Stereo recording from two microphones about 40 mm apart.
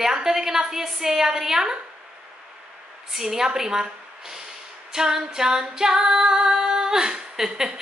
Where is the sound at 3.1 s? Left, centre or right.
Centre.